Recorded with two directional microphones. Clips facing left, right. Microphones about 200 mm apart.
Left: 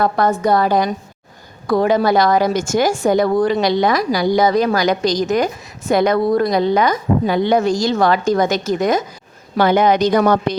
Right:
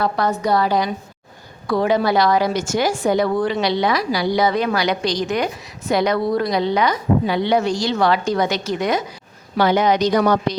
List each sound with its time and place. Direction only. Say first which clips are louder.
0.0 s a woman's voice: left 4 dB; 50° left (ahead or behind)